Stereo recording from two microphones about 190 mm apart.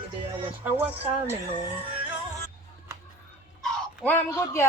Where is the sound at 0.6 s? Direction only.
10° right (ahead or behind).